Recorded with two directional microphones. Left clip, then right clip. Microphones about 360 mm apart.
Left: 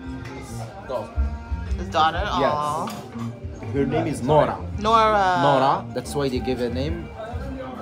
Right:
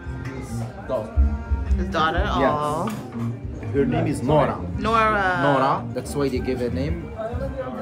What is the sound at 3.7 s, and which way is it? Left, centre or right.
Speech, left.